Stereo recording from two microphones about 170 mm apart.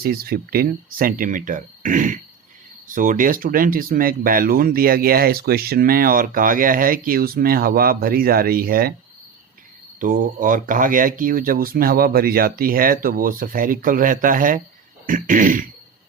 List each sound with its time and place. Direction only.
0.0 s speech: 60° right (ahead or behind)
10.0 s speech: 50° right (ahead or behind)
15.0 s throat clearing: 50° right (ahead or behind)